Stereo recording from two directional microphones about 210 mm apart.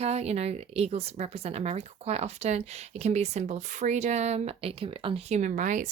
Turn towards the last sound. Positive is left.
turn(degrees=-40)  # may be behind; listen again after turning